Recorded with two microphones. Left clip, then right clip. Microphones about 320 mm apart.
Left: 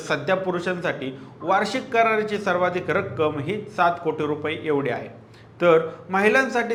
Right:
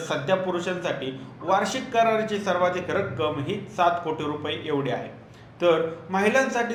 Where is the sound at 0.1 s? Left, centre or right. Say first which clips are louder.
Left 2 dB; left.